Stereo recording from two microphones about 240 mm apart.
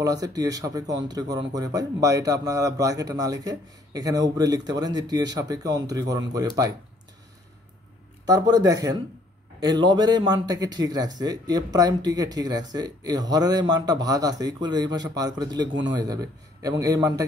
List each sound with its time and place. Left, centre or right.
0.0 s a man's voice: centre
8.3 s a man's voice: centre